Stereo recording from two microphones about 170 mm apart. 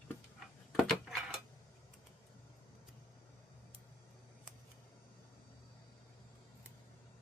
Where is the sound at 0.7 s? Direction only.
Centre (ahead or behind).